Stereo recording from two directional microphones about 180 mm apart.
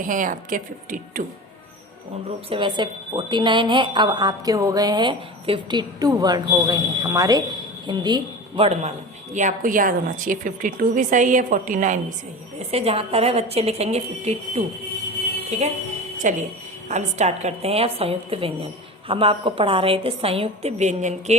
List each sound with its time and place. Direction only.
0.0 s a woman's voice: 45° right (ahead or behind)
2.5 s a woman's voice: 25° right (ahead or behind)
9.3 s a woman's voice: 45° right (ahead or behind)
12.7 s a woman's voice: 35° right (ahead or behind)